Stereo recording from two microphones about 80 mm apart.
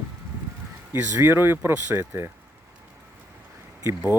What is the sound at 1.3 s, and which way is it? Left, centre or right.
Speech, right.